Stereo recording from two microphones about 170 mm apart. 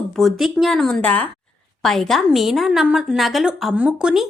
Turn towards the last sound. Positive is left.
turn(degrees=-5)  # may be behind; listen again after turning